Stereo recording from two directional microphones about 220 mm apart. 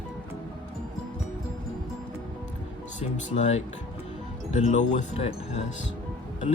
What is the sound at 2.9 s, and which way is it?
Speech, 30° left (ahead or behind).